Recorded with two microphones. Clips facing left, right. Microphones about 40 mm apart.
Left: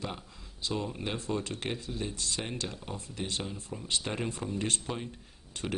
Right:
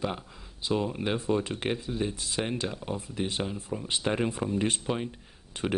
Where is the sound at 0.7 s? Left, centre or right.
Centre.